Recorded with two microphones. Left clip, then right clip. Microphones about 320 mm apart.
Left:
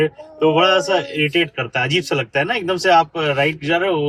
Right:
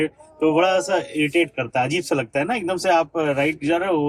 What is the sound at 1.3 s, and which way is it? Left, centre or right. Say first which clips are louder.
Speech: left 1 dB; right.